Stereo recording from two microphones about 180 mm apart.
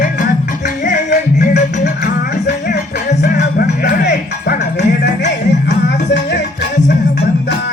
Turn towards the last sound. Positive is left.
turn(degrees=75)  # may be behind; listen again after turning